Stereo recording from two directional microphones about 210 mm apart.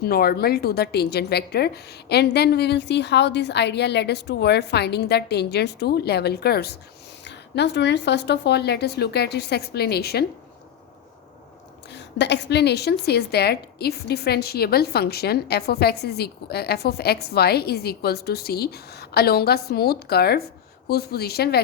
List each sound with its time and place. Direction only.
0.0 s a woman's voice: 45° left (ahead or behind)
11.9 s a woman's voice: 55° left (ahead or behind)